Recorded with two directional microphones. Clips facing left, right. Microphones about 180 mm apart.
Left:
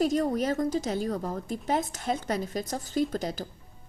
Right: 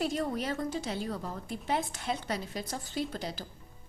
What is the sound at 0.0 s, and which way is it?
A woman's voice, 40° left (ahead or behind).